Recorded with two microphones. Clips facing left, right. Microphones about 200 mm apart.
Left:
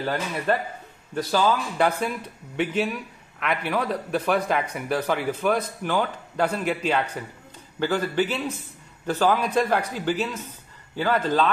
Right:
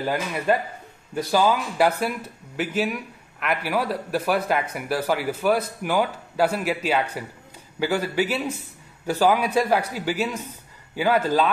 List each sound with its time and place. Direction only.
0.0 s speech: 10° right (ahead or behind)